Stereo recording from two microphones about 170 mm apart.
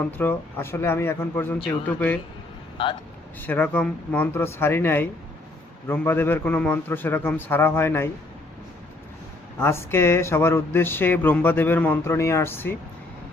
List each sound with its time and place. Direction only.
0.2 s speech: 10° left (ahead or behind)
2.8 s speech: 30° left (ahead or behind)
3.4 s speech: 10° left (ahead or behind)
9.6 s speech: 15° left (ahead or behind)